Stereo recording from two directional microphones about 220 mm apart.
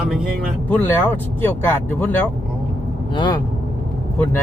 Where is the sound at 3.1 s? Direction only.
20° left (ahead or behind).